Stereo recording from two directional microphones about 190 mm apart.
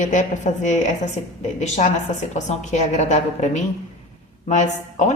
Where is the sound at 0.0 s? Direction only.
40° left (ahead or behind).